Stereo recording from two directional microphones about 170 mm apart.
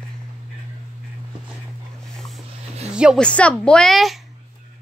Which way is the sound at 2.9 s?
5° right (ahead or behind).